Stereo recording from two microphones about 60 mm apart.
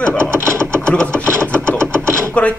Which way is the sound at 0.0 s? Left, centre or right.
Centre.